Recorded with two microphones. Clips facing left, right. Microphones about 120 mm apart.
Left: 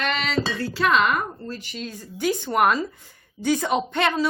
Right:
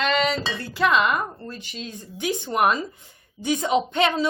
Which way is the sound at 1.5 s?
20° right (ahead or behind).